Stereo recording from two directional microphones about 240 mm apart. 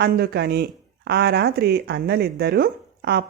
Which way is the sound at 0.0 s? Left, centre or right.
Right.